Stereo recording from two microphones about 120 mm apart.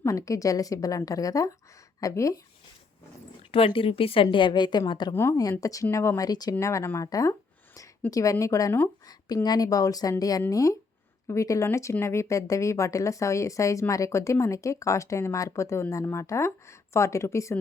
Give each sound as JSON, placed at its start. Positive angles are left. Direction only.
{"t": 0.0, "sound": "speech", "side_deg": 25}
{"t": 3.5, "sound": "speech", "side_deg": 50}